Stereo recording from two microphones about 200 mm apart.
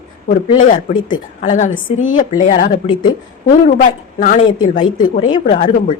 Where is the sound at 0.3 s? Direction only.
35° left (ahead or behind).